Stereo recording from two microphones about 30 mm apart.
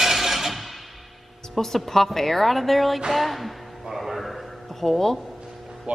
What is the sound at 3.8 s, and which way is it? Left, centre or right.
Music, centre.